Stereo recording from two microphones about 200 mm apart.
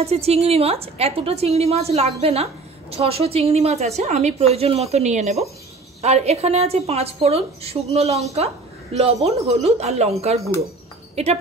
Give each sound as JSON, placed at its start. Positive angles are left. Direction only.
{"t": 0.0, "sound": "a woman's voice", "side_deg": -30}